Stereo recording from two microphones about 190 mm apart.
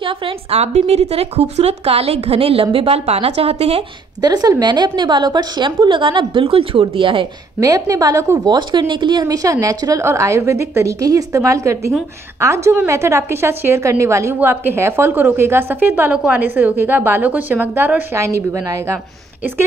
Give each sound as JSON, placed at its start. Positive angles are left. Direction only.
{"t": 0.0, "sound": "speech", "side_deg": -30}
{"t": 4.2, "sound": "a woman's voice", "side_deg": -20}